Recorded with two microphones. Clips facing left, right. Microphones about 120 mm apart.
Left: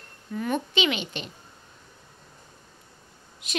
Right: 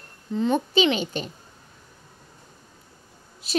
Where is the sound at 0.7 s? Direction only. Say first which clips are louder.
Right 5 dB; 35° right (ahead or behind).